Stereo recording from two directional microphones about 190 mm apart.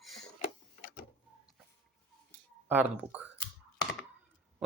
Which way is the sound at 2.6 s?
10° right (ahead or behind).